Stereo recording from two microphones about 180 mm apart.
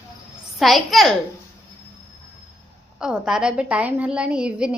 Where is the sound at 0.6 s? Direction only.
Centre (ahead or behind).